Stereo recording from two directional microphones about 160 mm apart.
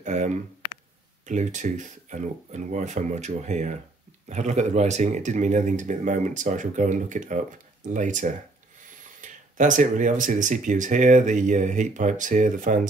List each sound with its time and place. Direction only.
0.0 s speech: 50° right (ahead or behind)